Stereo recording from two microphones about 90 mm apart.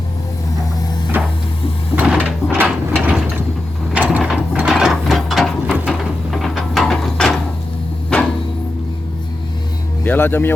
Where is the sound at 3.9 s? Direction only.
15° right (ahead or behind).